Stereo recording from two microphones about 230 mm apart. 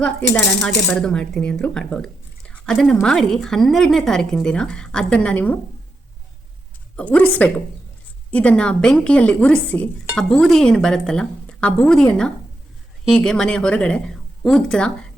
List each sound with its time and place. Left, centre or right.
0.0 s speech: centre
6.9 s a woman's voice: centre